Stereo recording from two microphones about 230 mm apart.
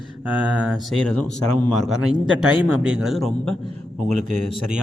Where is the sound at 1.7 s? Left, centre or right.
Left.